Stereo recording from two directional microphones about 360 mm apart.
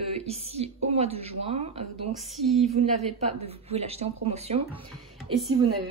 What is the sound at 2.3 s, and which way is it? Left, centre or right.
Speech, centre.